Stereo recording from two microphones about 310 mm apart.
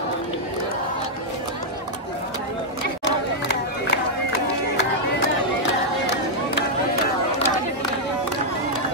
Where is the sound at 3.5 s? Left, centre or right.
Left.